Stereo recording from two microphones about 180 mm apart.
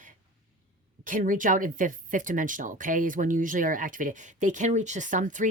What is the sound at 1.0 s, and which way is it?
Speech, 45° right (ahead or behind).